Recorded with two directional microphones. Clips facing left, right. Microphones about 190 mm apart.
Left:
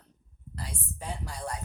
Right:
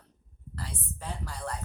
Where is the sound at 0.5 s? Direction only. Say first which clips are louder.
Even; 15° left (ahead or behind).